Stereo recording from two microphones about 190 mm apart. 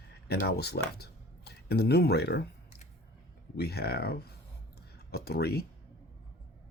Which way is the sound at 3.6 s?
55° left (ahead or behind).